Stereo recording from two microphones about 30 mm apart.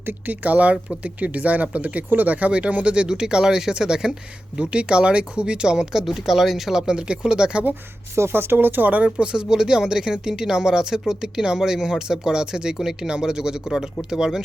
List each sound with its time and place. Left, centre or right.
0.3 s speech: right
2.1 s speech: right
3.1 s speech: right
4.5 s speech: right
5.7 s speech: centre
6.1 s speech: centre
6.7 s speech: right
8.5 s speech: right
9.0 s speech: right